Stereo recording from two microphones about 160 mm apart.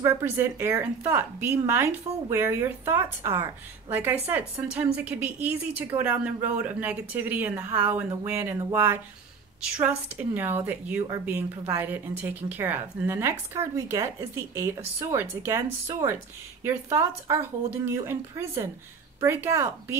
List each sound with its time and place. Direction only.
0.0 s speech: 15° right (ahead or behind)